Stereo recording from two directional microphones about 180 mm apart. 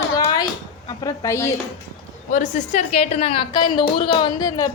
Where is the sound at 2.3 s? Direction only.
45° left (ahead or behind).